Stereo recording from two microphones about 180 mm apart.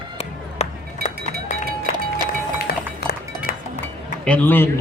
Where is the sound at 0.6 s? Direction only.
35° left (ahead or behind).